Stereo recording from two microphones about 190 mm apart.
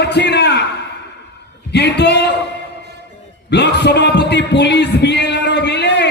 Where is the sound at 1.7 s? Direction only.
60° left (ahead or behind).